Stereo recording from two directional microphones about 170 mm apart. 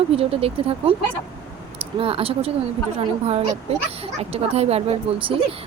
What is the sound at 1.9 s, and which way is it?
Speech, 35° right (ahead or behind).